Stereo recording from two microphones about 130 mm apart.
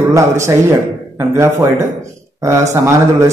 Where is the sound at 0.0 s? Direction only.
20° right (ahead or behind).